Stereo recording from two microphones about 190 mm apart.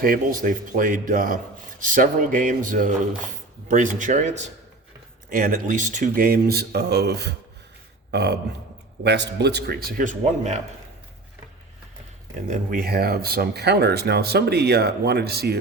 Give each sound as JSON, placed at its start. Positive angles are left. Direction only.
{"t": 0.0, "sound": "speech", "side_deg": -45}
{"t": 5.3, "sound": "speech", "side_deg": -45}
{"t": 12.5, "sound": "speech", "side_deg": -50}